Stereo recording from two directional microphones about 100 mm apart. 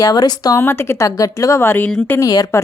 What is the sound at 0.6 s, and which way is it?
A woman's voice, 25° left (ahead or behind).